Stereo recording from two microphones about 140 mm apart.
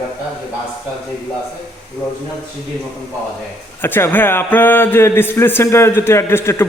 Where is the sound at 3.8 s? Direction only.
15° left (ahead or behind).